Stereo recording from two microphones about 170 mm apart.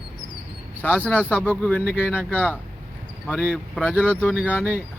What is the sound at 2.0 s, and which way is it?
Speech, 10° right (ahead or behind).